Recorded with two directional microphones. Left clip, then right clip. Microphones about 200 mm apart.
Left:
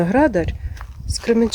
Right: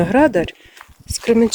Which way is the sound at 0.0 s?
10° right (ahead or behind).